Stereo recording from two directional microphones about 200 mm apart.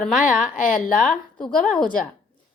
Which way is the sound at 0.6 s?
40° left (ahead or behind).